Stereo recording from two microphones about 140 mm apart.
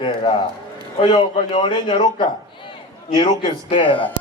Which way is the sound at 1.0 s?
35° left (ahead or behind).